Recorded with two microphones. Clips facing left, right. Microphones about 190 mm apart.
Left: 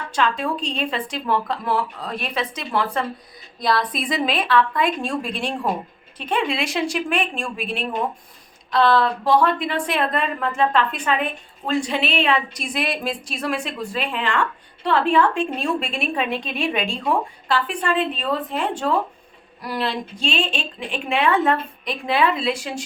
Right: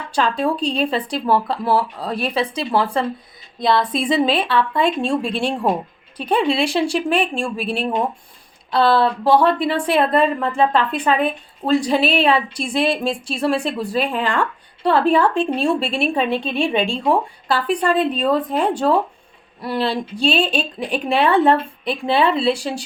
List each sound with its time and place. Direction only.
0.1 s a woman's voice: 35° right (ahead or behind)